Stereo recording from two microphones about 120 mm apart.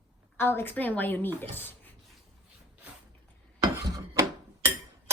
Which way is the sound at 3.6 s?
30° right (ahead or behind).